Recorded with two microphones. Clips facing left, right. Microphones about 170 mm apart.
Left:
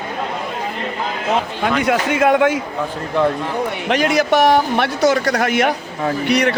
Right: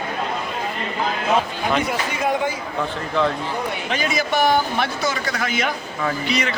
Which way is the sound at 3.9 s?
75° left (ahead or behind).